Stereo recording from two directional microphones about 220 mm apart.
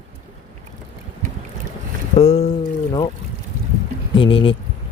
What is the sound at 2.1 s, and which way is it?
Speech, 25° left (ahead or behind).